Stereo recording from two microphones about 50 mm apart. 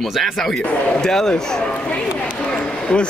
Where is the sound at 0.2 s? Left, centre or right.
Centre.